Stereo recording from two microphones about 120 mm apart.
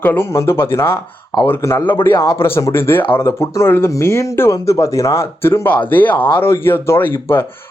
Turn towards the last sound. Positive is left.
turn(degrees=20)  # may be behind; listen again after turning